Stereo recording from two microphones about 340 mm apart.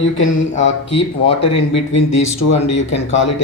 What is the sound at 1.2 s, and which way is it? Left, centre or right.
Speech, centre.